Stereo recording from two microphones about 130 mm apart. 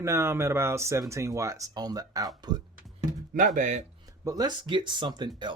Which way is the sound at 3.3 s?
80° right.